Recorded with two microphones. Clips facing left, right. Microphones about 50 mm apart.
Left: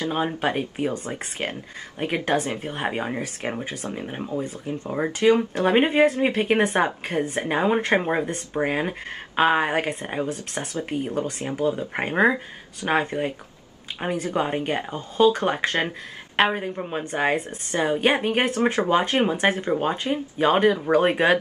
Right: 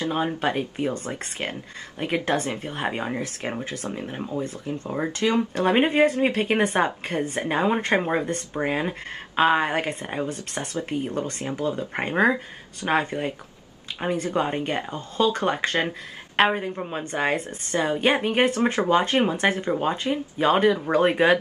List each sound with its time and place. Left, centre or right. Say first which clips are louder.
0.1 s speech: even; centre
4.8 s speech: left 5 dB; centre
16.3 s speech: right 1 dB; centre